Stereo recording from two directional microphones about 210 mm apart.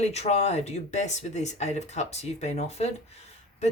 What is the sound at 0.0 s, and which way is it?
Speech, 30° left (ahead or behind).